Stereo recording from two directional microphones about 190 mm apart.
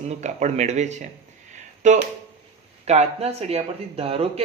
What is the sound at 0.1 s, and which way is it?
Speech, 40° right (ahead or behind).